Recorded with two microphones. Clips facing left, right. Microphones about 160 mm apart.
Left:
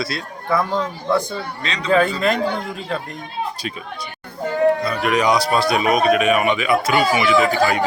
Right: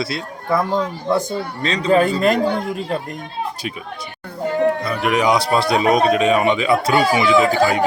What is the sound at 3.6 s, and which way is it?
Speech, 15° right (ahead or behind).